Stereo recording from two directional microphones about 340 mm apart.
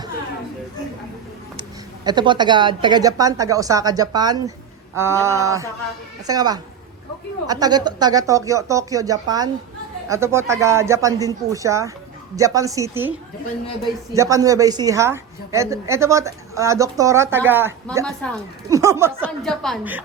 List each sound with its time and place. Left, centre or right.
2.0 s a woman's voice: centre
18.7 s a woman's voice: centre